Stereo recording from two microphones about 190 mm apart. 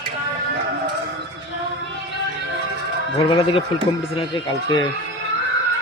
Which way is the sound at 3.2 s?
25° left (ahead or behind).